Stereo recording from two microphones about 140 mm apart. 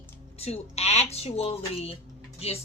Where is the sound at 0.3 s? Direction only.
50° left (ahead or behind).